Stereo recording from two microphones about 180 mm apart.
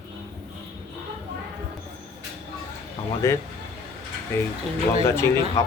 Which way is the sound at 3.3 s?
15° left (ahead or behind).